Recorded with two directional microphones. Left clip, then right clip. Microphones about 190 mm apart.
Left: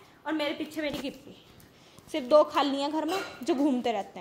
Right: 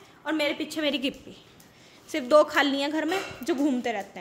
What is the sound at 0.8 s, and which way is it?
Speech, 45° right (ahead or behind).